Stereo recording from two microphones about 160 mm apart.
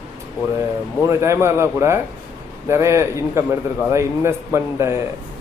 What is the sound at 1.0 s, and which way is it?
A man's voice, 20° right (ahead or behind).